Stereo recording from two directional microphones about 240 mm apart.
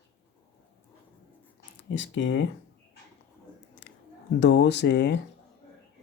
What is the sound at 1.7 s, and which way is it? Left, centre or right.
Speech, left.